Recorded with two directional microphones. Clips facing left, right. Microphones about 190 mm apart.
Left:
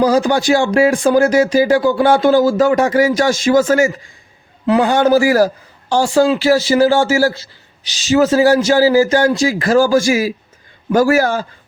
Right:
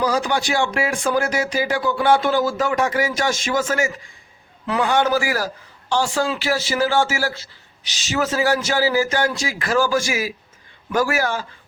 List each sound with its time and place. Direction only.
0.0 s a man's voice: 40° left (ahead or behind)